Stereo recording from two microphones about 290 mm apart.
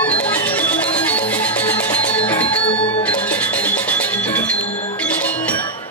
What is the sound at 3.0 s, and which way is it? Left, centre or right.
Music, centre.